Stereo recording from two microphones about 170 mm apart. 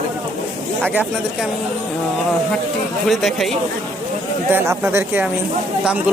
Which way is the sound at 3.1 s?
Centre (ahead or behind).